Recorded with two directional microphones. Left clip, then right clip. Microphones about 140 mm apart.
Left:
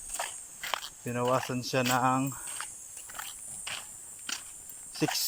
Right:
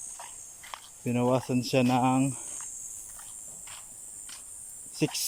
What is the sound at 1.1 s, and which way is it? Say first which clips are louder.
Speech: right 2 dB; 25° right (ahead or behind).